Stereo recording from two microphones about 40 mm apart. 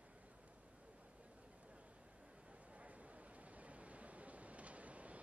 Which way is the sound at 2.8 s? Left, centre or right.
Right.